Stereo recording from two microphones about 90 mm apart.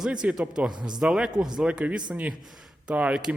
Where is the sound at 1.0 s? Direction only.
5° right (ahead or behind).